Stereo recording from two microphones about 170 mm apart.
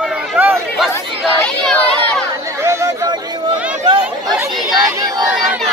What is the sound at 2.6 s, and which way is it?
Chatter, 15° right (ahead or behind).